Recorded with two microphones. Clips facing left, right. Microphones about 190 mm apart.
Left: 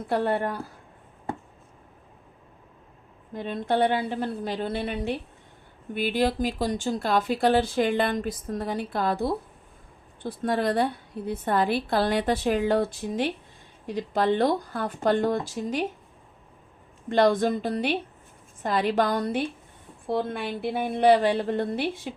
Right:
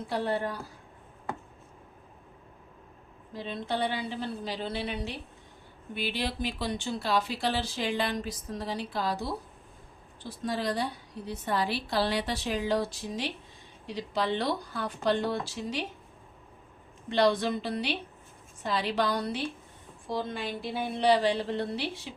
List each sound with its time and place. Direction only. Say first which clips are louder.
0.1 s a woman's voice: left 5 dB; 55° left (ahead or behind)
3.3 s a woman's voice: left 7 dB; 50° left (ahead or behind)
17.1 s a woman's voice: left 4 dB; 50° left (ahead or behind)